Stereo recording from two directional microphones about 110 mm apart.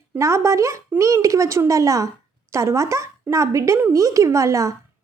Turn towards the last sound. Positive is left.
turn(degrees=-30)  # may be behind; listen again after turning